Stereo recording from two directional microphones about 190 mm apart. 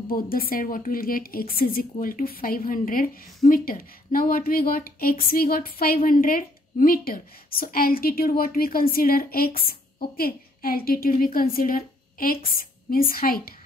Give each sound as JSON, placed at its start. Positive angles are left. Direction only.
{"t": 0.1, "sound": "a woman's voice", "side_deg": 50}